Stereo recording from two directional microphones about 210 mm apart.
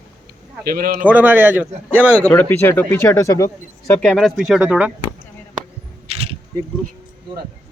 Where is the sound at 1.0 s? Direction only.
10° right (ahead or behind).